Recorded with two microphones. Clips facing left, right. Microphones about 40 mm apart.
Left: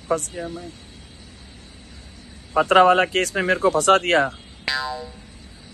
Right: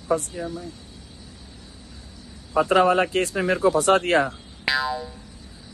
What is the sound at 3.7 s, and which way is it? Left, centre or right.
Speech, left.